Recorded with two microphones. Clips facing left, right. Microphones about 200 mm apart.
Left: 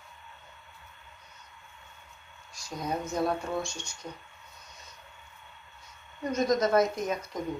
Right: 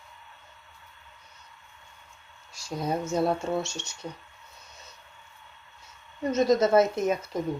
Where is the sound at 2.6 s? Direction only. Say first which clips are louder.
Right 4 dB; 30° right (ahead or behind).